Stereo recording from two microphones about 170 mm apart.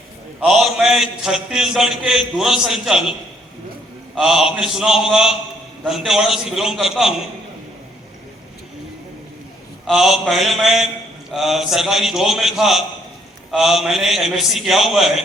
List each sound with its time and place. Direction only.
0.3 s a man's voice: centre (ahead or behind)
9.8 s a man's voice: 5° right (ahead or behind)